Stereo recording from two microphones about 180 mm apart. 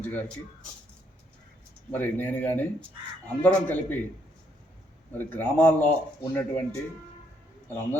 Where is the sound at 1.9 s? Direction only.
10° left (ahead or behind).